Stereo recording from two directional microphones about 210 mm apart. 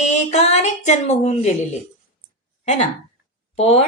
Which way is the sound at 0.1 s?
35° left (ahead or behind).